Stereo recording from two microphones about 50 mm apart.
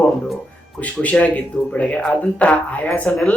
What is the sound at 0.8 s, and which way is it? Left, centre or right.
Speech, left.